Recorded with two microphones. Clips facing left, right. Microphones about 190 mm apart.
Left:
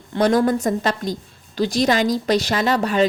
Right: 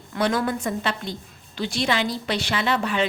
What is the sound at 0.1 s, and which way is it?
A woman's voice, 40° left (ahead or behind).